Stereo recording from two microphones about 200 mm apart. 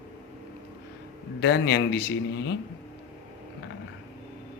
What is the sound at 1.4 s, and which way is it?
Speech, 60° left (ahead or behind).